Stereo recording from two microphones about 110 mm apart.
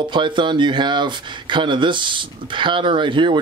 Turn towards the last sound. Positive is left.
turn(degrees=-50)  # may be behind; listen again after turning